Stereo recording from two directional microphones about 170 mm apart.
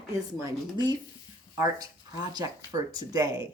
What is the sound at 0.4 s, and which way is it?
A woman's voice, 25° right (ahead or behind).